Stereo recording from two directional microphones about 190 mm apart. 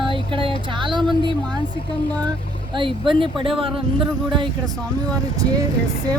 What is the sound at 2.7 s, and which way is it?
Speech, 25° right (ahead or behind).